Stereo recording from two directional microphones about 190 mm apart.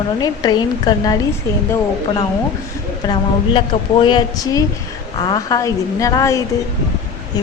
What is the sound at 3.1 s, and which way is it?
Speech, 25° left (ahead or behind).